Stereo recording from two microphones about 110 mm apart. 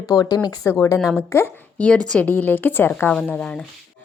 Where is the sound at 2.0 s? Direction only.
15° left (ahead or behind).